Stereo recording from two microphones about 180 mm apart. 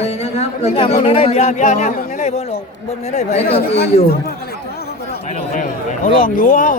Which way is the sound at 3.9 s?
35° left (ahead or behind).